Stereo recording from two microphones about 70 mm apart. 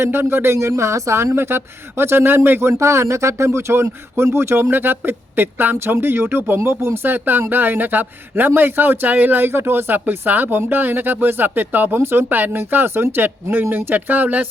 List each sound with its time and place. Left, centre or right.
0.0 s a woman's voice: right